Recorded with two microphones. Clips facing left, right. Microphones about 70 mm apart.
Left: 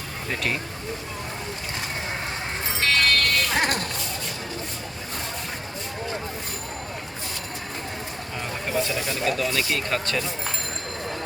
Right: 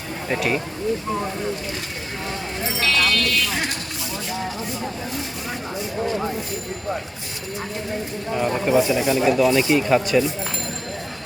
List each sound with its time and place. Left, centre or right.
0.3 s speech: centre
2.8 s a sound: left
8.4 s speech: centre